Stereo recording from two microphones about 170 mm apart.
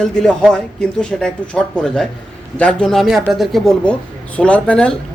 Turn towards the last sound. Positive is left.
turn(degrees=5)  # may be behind; listen again after turning